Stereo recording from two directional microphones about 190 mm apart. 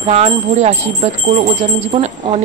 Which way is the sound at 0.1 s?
35° right (ahead or behind).